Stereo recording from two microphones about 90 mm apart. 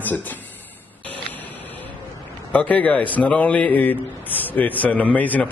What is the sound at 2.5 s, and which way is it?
A man's voice, 15° left (ahead or behind).